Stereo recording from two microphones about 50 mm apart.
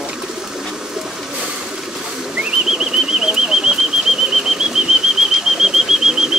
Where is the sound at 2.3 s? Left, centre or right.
Centre.